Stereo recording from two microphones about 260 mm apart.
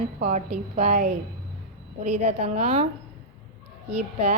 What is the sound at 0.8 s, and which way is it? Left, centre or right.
Speech, right.